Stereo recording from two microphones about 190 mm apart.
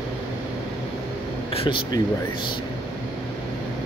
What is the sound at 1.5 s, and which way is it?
Speech, 25° left (ahead or behind).